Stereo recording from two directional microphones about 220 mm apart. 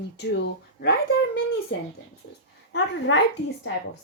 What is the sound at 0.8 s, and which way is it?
Babbling, 45° left (ahead or behind).